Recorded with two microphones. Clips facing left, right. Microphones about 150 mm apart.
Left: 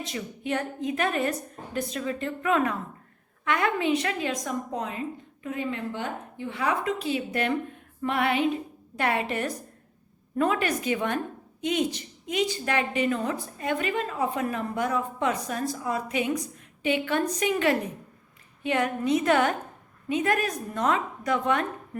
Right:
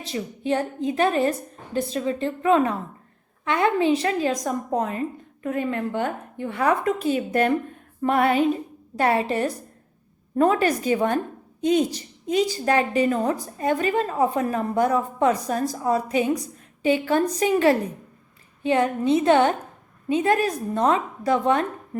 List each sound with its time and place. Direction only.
0.0 s a woman's voice: 30° right (ahead or behind)